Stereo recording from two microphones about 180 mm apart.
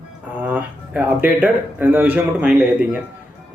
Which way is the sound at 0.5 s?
10° right (ahead or behind).